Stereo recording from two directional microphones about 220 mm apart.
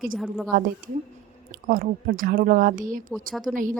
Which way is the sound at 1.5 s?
40° right (ahead or behind).